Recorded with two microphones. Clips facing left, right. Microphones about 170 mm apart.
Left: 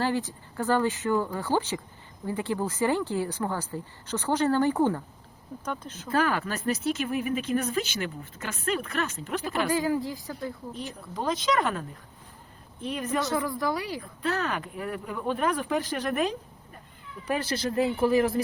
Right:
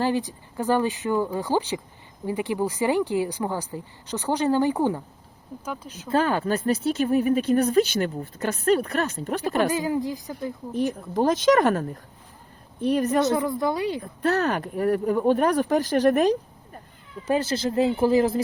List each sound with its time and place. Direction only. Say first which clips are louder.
0.0 s speech: right 3 dB; 15° right (ahead or behind)
6.1 s speech: right 4 dB; 25° right (ahead or behind)
9.6 s speech: right 2 dB; 20° right (ahead or behind)
10.8 s speech: right 11 dB; 50° right (ahead or behind)
13.2 s speech: right 5 dB; 20° right (ahead or behind)
14.2 s speech: right 6 dB; 40° right (ahead or behind)
17.2 s speech: right 5 dB; 25° right (ahead or behind)